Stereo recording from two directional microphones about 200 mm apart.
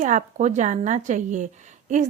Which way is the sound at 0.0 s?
40° right (ahead or behind).